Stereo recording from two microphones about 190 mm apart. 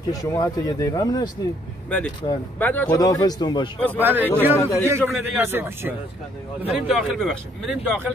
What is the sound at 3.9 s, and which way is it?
A man's voice, 10° right (ahead or behind).